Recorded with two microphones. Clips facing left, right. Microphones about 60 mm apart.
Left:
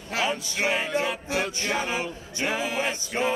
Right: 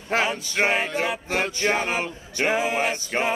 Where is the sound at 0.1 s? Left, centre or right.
Right.